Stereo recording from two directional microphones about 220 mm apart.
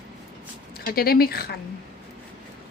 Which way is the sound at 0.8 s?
45° left (ahead or behind).